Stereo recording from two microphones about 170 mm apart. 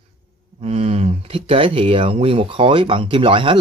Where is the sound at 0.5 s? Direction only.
35° right (ahead or behind).